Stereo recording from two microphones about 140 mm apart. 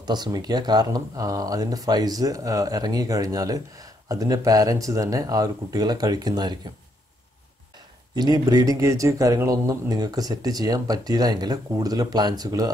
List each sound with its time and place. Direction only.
0.0 s speech: 30° right (ahead or behind)
8.1 s speech: 30° right (ahead or behind)